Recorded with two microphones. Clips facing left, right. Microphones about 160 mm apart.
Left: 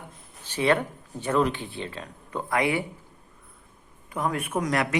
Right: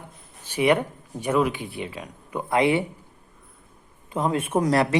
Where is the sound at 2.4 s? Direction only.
25° right (ahead or behind).